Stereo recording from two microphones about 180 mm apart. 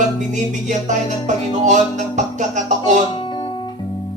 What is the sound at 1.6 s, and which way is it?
A man's voice, 40° right (ahead or behind).